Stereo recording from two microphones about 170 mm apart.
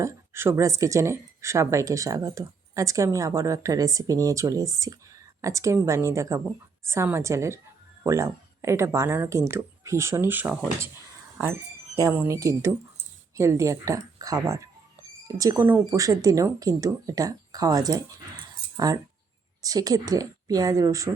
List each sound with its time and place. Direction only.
0.0 s speech: 15° right (ahead or behind)
11.9 s speech: 15° right (ahead or behind)